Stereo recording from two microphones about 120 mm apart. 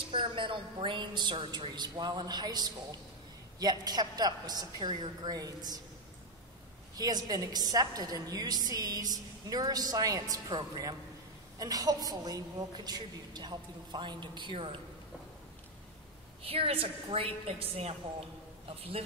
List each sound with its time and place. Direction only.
0.1 s a woman's voice: 45° right (ahead or behind)
7.0 s a woman's voice: 35° right (ahead or behind)
16.4 s a woman's voice: 50° right (ahead or behind)